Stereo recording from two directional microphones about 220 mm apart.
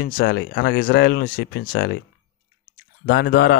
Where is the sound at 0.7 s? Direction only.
40° left (ahead or behind).